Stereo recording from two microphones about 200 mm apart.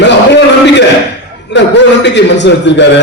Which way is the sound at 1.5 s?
60° left (ahead or behind).